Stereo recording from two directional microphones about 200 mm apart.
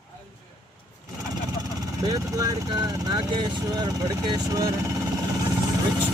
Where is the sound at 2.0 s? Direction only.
15° right (ahead or behind).